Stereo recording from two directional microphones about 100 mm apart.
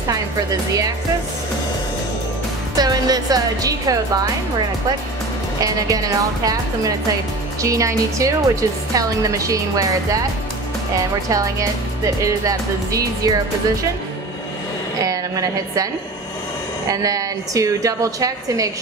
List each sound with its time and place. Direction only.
2.8 s a woman's voice: 40° right (ahead or behind)
5.6 s a woman's voice: 35° right (ahead or behind)
11.2 s a woman's voice: 35° right (ahead or behind)
15.0 s a woman's voice: 35° right (ahead or behind)
16.9 s a woman's voice: 35° right (ahead or behind)